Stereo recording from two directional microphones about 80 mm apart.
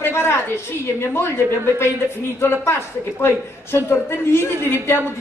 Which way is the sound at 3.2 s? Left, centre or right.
Left.